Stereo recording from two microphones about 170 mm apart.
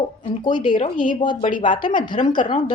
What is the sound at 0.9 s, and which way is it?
Speech, 50° left (ahead or behind).